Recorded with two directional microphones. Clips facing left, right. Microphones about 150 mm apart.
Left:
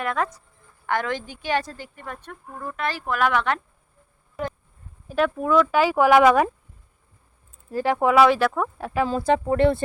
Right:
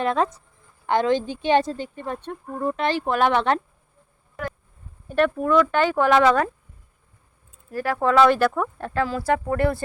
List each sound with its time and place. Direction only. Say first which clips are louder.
0.0 s speech: right 4 dB; 25° right (ahead or behind)
5.0 s speech: right 2 dB; centre (ahead or behind)
7.7 s speech: left 2 dB; 20° left (ahead or behind)
8.1 s speech: right 1 dB; 5° left (ahead or behind)
9.0 s speech: left 4 dB; 25° left (ahead or behind)